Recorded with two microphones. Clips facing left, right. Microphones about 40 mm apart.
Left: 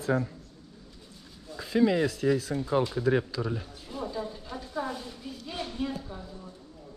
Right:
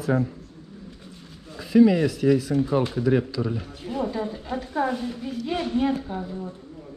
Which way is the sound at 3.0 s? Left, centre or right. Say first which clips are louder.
Right 4 dB; right.